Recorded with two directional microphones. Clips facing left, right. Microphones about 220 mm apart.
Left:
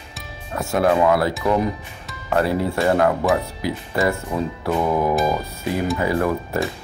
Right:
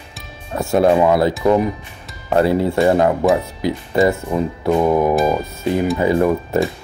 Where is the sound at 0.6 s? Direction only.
25° right (ahead or behind).